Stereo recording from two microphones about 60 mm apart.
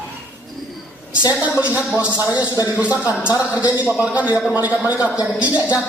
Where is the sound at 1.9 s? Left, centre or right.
Right.